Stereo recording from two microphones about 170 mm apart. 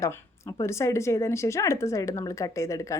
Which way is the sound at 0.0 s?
20° left (ahead or behind).